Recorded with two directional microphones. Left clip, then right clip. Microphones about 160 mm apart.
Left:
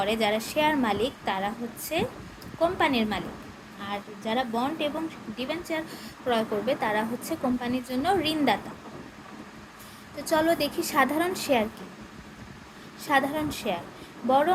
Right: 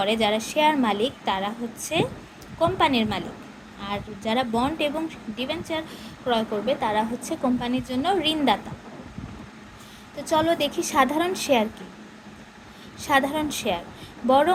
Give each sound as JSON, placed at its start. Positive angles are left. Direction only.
{"t": 0.0, "sound": "a woman's voice", "side_deg": -20}
{"t": 5.4, "sound": "a woman's voice", "side_deg": -15}
{"t": 10.2, "sound": "a woman's voice", "side_deg": -15}
{"t": 13.0, "sound": "a woman's voice", "side_deg": -25}